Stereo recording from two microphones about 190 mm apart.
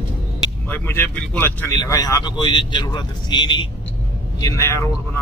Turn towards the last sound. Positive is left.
turn(degrees=15)  # may be behind; listen again after turning